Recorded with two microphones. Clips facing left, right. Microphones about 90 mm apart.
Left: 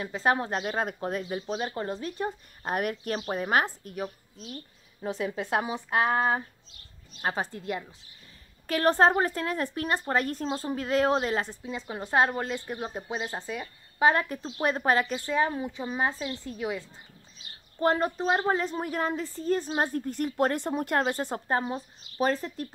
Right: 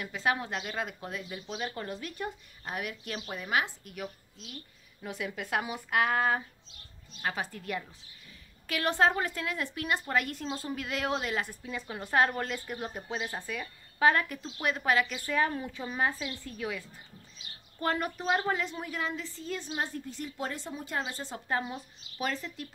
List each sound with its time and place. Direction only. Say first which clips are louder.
0.0 s speech: left 5 dB; 35° left (ahead or behind)
2.6 s a woman's voice: left 8 dB; 50° left (ahead or behind); by 7.8 s 25° left (ahead or behind)
8.6 s speech: left 5 dB; 40° left (ahead or behind)
14.4 s speech: left 5 dB; 35° left (ahead or behind)
15.3 s a woman's voice: left 2 dB; 20° left (ahead or behind); by 21.4 s 55° left (ahead or behind)
21.5 s speech: left 2 dB; 35° left (ahead or behind)